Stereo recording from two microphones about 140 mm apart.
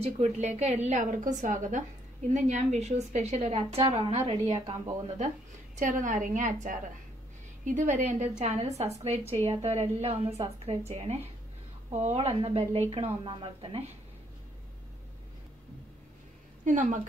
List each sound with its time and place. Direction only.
0.0 s a woman's voice: 55° right (ahead or behind)
5.8 s a woman's voice: 65° right (ahead or behind); by 13.9 s 45° right (ahead or behind)
16.6 s a woman's voice: 65° right (ahead or behind)